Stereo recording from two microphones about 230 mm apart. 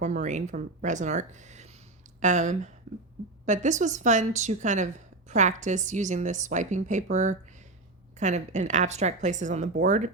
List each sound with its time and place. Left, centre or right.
0.0 s a woman's voice: right